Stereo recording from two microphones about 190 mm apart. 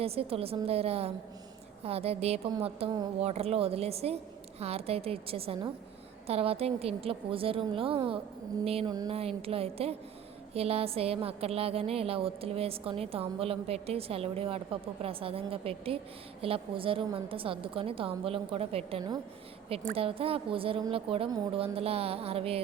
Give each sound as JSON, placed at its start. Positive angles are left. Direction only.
{"t": 0.0, "sound": "a woman's voice", "side_deg": -30}